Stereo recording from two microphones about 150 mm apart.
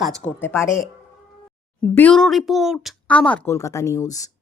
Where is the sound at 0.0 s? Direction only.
5° left (ahead or behind).